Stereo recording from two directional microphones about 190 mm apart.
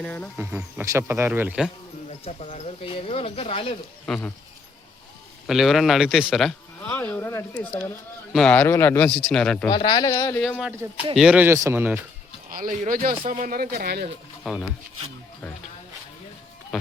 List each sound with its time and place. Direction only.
0.0 s a man's voice: 10° left (ahead or behind)
0.3 s speech: 10° right (ahead or behind)
2.0 s speech: 35° left (ahead or behind)
4.0 s speech: 5° left (ahead or behind)
5.5 s speech: centre (ahead or behind)
6.8 s a man's voice: 10° left (ahead or behind)
9.6 s speech: 20° left (ahead or behind)
10.4 s speech: centre (ahead or behind)
12.5 s speech: 45° right (ahead or behind)
14.4 s speech: centre (ahead or behind)